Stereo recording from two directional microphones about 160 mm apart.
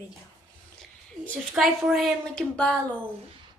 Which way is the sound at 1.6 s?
5° right (ahead or behind).